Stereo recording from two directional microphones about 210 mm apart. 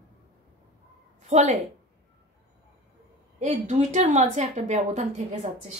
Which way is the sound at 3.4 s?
35° right (ahead or behind).